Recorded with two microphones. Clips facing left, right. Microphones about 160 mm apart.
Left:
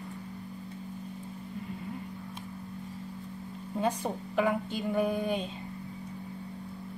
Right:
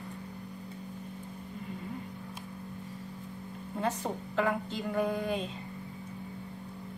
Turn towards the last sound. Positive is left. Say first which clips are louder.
# left 2 dB
turn(degrees=15)  # may be behind; listen again after turning